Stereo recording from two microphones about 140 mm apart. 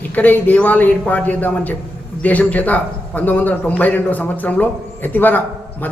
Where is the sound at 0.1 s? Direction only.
10° left (ahead or behind).